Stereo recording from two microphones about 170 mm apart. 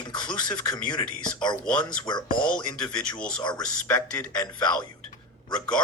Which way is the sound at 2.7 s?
5° left (ahead or behind).